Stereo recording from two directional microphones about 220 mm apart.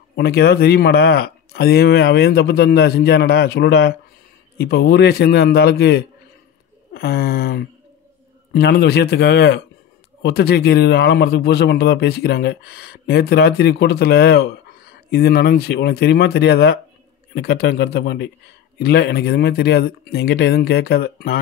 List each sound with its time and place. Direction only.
0.1 s a man's voice: 45° left (ahead or behind)